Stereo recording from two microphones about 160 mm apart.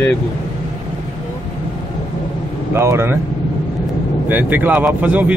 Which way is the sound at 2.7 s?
15° right (ahead or behind).